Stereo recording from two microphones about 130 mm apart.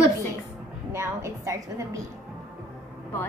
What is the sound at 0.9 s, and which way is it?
A woman's voice, 20° right (ahead or behind).